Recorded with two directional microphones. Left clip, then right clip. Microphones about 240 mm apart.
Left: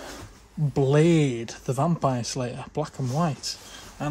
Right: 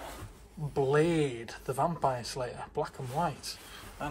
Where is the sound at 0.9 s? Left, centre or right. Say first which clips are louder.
Left 7 dB; left.